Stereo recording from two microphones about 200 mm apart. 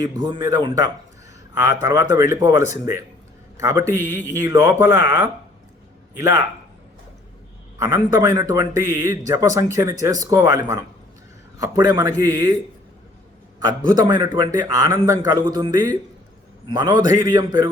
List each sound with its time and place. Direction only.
0.0 s a man's voice: 20° right (ahead or behind)
7.9 s speech: 15° right (ahead or behind)
13.7 s a man's voice: 20° right (ahead or behind)